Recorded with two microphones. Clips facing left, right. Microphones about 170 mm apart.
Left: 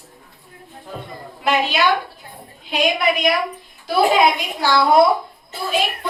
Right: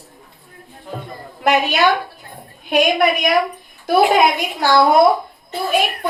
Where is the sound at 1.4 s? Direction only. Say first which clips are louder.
Right 3 dB; 50° right (ahead or behind).